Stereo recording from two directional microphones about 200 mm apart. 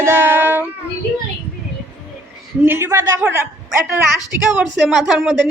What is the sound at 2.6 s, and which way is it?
Speech, 10° right (ahead or behind).